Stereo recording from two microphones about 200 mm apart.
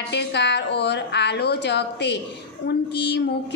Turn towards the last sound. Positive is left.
turn(degrees=60)  # may be behind; listen again after turning